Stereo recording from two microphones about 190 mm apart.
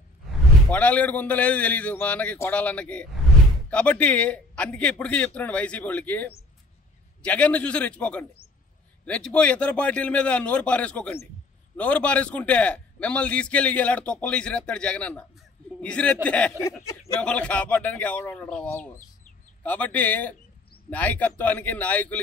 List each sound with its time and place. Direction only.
0.7 s a man's voice: 5° left (ahead or behind)